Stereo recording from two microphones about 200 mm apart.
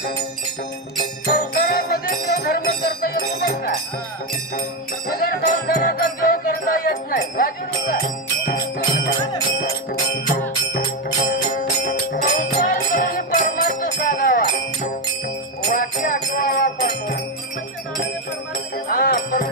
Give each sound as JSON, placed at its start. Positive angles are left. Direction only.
{"t": 1.2, "sound": "music", "side_deg": 45}
{"t": 5.1, "sound": "music", "side_deg": 45}
{"t": 11.1, "sound": "music", "side_deg": 40}
{"t": 15.7, "sound": "music", "side_deg": 45}
{"t": 18.9, "sound": "music", "side_deg": 45}